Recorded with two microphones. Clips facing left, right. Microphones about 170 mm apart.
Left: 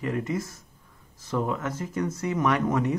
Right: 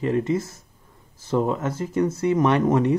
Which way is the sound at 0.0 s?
25° right (ahead or behind).